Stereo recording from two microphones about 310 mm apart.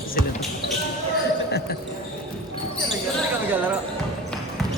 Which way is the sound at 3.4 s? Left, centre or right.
Centre.